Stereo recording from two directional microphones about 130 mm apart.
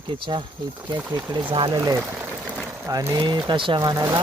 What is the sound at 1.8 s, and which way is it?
Speech, 25° right (ahead or behind).